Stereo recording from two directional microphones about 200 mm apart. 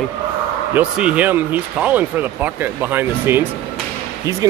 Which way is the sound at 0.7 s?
5° right (ahead or behind).